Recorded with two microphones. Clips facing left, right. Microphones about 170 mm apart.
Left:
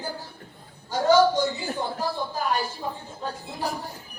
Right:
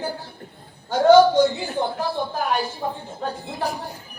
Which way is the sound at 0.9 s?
65° right (ahead or behind).